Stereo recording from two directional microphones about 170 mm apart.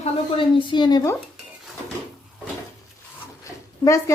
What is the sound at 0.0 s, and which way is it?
Speech, 30° left (ahead or behind).